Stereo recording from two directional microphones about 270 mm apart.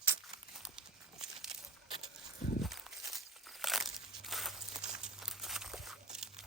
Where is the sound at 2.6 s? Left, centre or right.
Centre.